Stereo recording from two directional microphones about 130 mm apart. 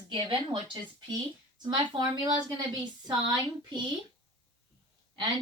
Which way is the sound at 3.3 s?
35° right (ahead or behind).